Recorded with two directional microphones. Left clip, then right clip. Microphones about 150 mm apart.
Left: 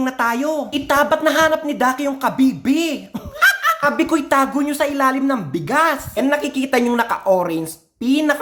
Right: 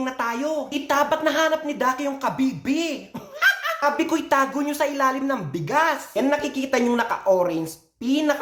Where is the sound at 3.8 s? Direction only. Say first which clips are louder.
Left 4 dB; 25° left (ahead or behind).